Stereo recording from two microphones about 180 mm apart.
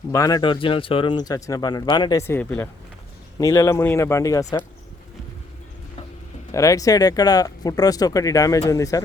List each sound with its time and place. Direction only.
0.1 s speech: 20° left (ahead or behind)
6.5 s speech: 20° left (ahead or behind)